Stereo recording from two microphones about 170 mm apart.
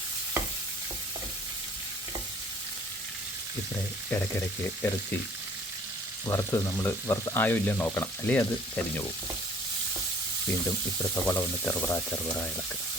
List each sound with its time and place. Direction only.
4.1 s speech: 15° left (ahead or behind)
6.2 s speech: 15° left (ahead or behind)
11.1 s speech: 10° left (ahead or behind)